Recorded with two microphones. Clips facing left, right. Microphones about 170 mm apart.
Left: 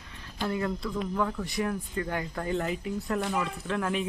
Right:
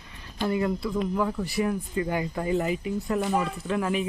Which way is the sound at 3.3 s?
35° right (ahead or behind).